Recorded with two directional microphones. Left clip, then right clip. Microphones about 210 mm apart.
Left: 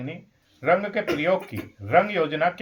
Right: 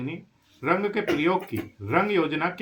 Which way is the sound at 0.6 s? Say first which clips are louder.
Left 3 dB; 15° left (ahead or behind).